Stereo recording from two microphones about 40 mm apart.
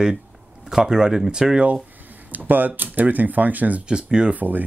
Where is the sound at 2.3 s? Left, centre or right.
Right.